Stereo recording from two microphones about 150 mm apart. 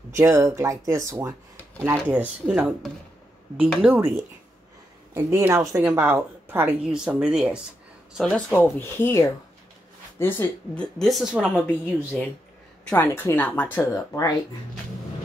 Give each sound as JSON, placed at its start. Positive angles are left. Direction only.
{"t": 0.1, "sound": "a woman's voice", "side_deg": -20}
{"t": 2.5, "sound": "a woman's voice", "side_deg": -5}
{"t": 5.1, "sound": "a woman's voice", "side_deg": -20}
{"t": 6.8, "sound": "a woman's voice", "side_deg": -5}
{"t": 8.5, "sound": "a woman's voice", "side_deg": 15}
{"t": 12.9, "sound": "speech", "side_deg": 15}